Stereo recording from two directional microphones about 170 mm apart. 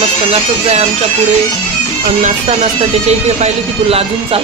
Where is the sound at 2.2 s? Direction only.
40° right (ahead or behind).